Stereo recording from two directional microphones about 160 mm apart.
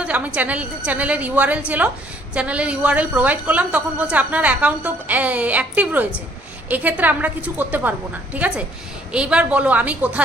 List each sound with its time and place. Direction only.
0.0 s a woman's voice: 10° right (ahead or behind)